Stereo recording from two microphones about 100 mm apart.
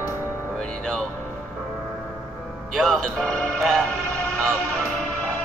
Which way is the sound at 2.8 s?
5° left (ahead or behind).